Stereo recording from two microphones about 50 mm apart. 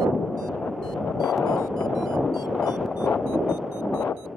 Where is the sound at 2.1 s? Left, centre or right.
Centre.